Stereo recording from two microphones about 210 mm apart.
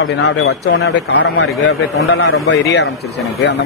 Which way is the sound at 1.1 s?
90° left.